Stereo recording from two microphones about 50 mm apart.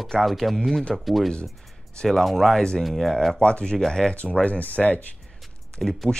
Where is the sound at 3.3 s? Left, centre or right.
Left.